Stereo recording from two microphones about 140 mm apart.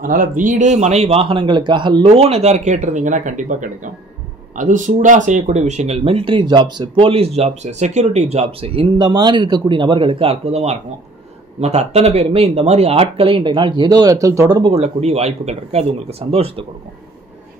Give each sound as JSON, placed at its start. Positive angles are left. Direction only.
{"t": 0.0, "sound": "speech", "side_deg": -75}
{"t": 14.6, "sound": "speech", "side_deg": -50}